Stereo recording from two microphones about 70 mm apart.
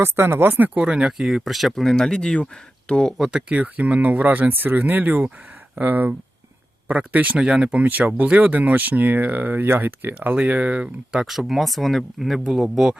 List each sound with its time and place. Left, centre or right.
0.0 s speech: right; by 3.2 s centre
3.3 s speech: centre